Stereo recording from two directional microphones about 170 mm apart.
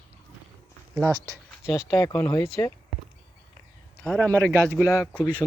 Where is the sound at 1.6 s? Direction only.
20° left (ahead or behind).